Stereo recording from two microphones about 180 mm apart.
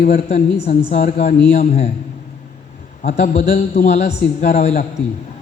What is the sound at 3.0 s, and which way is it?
A man's voice, 40° left (ahead or behind).